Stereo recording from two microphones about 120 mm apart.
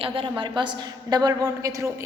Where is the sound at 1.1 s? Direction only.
35° right (ahead or behind).